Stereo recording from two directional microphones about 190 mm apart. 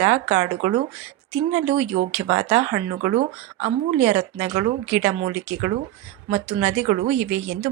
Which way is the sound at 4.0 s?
10° right (ahead or behind).